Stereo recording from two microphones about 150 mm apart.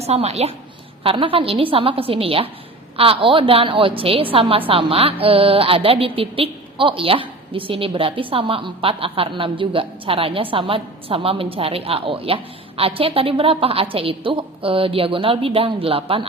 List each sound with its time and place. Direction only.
0.0 s a woman's voice: 45° right (ahead or behind)